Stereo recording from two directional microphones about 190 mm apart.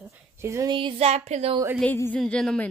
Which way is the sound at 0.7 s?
30° right (ahead or behind).